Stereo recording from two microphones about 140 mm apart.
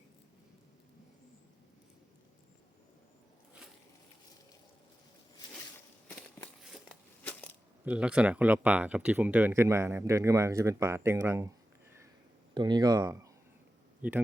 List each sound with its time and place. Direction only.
6.6 s a sound: 5° left (ahead or behind)
7.9 s speech: 10° right (ahead or behind)
12.5 s speech: 30° right (ahead or behind)